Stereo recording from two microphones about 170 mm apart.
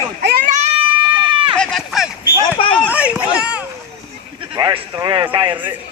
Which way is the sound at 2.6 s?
30° left (ahead or behind).